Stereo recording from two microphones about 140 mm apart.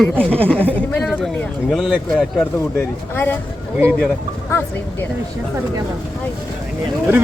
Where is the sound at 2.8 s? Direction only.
15° left (ahead or behind).